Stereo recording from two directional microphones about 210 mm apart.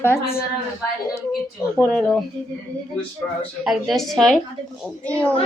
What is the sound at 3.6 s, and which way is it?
A woman's voice, centre (ahead or behind).